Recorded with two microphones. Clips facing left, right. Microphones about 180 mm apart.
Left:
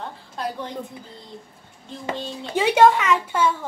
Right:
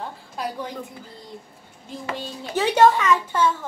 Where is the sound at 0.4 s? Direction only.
5° right (ahead or behind).